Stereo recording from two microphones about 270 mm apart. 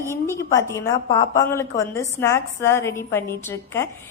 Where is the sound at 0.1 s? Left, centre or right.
Centre.